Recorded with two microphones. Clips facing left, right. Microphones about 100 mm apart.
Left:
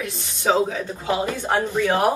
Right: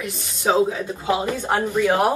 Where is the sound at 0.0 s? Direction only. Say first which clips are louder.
Even; 15° right (ahead or behind).